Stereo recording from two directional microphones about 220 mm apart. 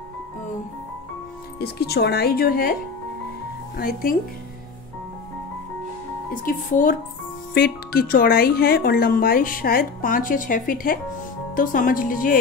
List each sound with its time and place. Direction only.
1.6 s speech: 45° left (ahead or behind)
6.4 s speech: 35° left (ahead or behind)